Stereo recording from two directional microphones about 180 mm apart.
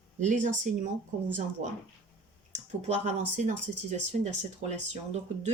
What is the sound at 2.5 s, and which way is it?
Clicking, 40° right (ahead or behind).